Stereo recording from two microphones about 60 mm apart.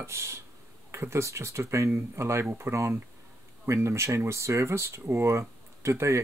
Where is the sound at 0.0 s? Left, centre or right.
Right.